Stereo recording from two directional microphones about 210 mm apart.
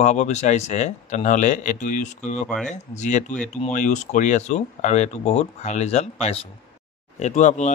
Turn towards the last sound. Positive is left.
turn(degrees=35)  # may be behind; listen again after turning